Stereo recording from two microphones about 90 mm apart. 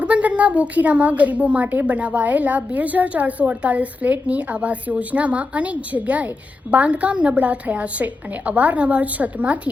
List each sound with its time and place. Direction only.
0.0 s a woman's voice: 15° right (ahead or behind)